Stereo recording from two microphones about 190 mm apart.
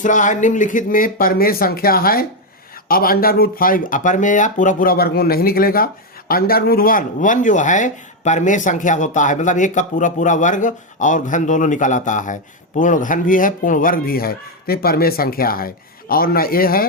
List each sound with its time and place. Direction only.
0.0 s speech: 40° left (ahead or behind)